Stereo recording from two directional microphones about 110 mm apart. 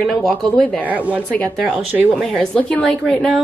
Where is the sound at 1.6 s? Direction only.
15° right (ahead or behind).